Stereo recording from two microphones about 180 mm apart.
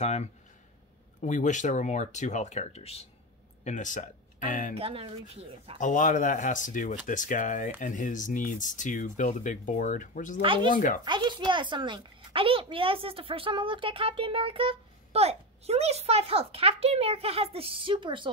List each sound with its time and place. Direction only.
0.0 s speech: 40° left (ahead or behind)
4.7 s a child's voice: 30° right (ahead or behind)
5.8 s speech: 45° left (ahead or behind)
10.4 s speech: 30° right (ahead or behind)
10.7 s speech: 50° left (ahead or behind)
11.1 s a child's voice: 25° right (ahead or behind)